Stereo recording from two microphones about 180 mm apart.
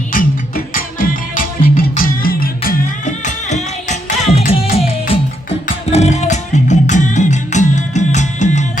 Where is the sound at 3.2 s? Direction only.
40° left (ahead or behind).